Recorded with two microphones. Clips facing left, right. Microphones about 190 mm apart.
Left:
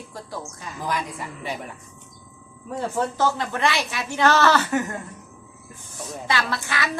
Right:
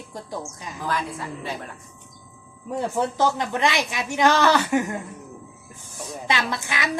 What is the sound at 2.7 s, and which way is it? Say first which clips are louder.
Speech: right 1 dB; 15° right (ahead or behind).